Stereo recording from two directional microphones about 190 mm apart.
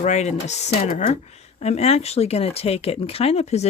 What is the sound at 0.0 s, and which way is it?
Speech, 40° left (ahead or behind).